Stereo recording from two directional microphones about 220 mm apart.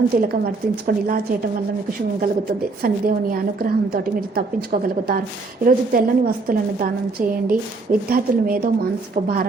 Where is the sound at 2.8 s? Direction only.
40° right (ahead or behind).